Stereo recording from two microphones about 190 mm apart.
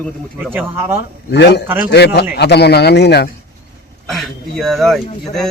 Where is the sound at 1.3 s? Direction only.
65° left (ahead or behind).